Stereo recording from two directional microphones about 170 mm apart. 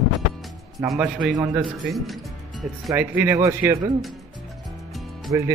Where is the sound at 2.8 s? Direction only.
15° right (ahead or behind).